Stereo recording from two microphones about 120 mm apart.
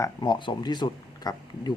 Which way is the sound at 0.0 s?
35° left (ahead or behind).